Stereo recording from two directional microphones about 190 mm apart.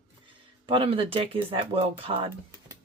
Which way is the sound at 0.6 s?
25° right (ahead or behind).